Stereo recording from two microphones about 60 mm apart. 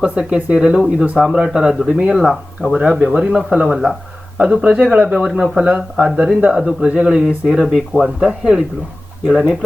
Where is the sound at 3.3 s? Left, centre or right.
Centre.